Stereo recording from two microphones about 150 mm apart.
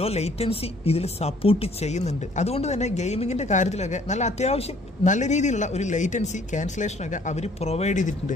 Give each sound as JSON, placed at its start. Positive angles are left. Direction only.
{"t": 0.0, "sound": "speech", "side_deg": 45}